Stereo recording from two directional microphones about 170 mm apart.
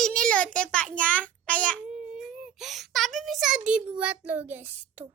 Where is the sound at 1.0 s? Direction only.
5° left (ahead or behind).